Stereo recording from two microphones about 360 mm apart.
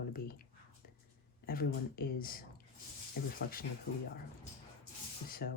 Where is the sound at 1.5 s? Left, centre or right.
Left.